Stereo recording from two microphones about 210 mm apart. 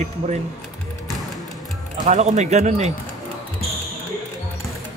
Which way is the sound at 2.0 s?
35° right (ahead or behind).